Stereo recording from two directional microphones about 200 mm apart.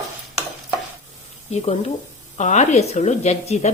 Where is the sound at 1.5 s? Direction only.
30° left (ahead or behind).